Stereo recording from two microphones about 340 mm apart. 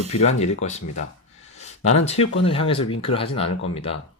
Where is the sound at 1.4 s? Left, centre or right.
Centre.